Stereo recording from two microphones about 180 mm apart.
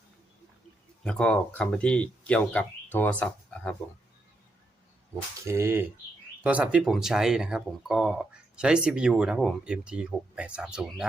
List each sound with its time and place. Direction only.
1.0 s speech: 5° left (ahead or behind)
5.5 s speech: 15° right (ahead or behind)